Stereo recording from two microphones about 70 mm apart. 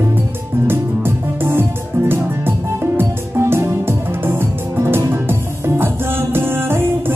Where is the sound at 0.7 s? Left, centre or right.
Right.